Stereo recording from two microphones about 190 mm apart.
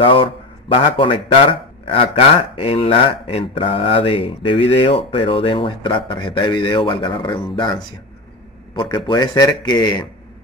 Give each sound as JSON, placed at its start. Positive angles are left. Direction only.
{"t": 0.0, "sound": "speech", "side_deg": 30}
{"t": 8.7, "sound": "speech", "side_deg": 25}